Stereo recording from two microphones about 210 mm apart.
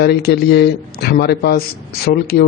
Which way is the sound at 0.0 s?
50° left (ahead or behind).